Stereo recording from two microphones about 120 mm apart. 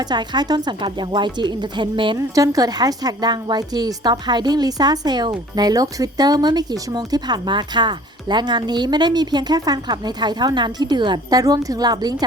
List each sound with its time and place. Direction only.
0.0 s a woman's voice: 35° right (ahead or behind)
2.1 s a woman's voice: 30° right (ahead or behind)